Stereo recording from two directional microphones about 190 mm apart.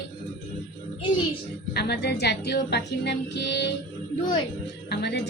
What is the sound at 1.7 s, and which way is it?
Speech, 60° left (ahead or behind).